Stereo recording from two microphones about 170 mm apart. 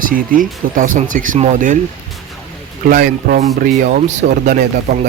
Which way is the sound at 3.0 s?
50° right (ahead or behind).